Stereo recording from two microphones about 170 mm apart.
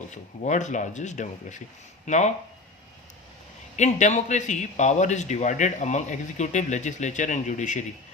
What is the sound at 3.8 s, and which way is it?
A man's voice, 45° left (ahead or behind).